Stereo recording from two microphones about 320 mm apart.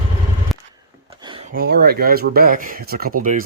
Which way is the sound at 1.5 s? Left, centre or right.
Right.